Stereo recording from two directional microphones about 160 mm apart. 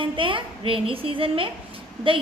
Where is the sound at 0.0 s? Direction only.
30° right (ahead or behind).